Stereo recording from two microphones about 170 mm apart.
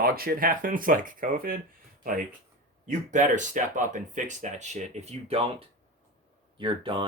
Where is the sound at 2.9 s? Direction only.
45° right (ahead or behind).